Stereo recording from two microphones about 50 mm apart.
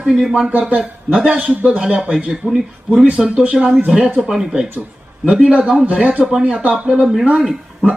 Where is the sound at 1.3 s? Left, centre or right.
Right.